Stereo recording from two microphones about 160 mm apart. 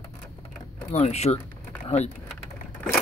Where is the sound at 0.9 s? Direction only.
45° left (ahead or behind).